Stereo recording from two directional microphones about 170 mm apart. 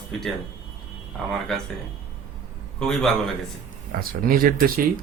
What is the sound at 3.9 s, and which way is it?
Speech, 55° right (ahead or behind).